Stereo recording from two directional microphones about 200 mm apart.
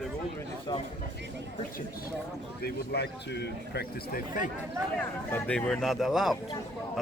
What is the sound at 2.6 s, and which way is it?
A man's voice, 55° left (ahead or behind).